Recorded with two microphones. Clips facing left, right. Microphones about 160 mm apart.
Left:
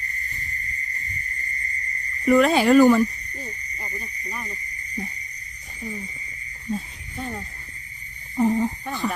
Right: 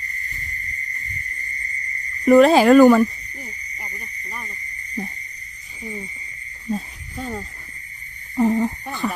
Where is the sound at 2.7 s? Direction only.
60° right (ahead or behind).